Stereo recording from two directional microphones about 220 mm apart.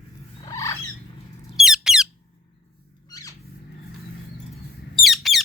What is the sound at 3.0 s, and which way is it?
Squeak, 15° left (ahead or behind).